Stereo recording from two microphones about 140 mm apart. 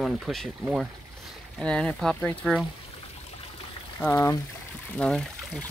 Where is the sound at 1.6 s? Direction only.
5° left (ahead or behind).